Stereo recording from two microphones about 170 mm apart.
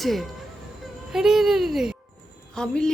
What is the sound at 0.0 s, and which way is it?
Speech, centre (ahead or behind).